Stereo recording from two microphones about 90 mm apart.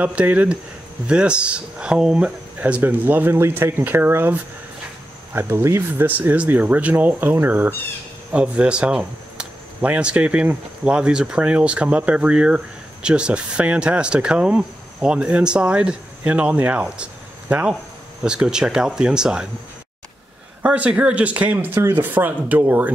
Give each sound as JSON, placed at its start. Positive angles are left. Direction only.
{"t": 0.0, "sound": "speech", "side_deg": -15}
{"t": 16.8, "sound": "a sound", "side_deg": -10}
{"t": 18.2, "sound": "speech", "side_deg": -10}
{"t": 20.6, "sound": "speech", "side_deg": -15}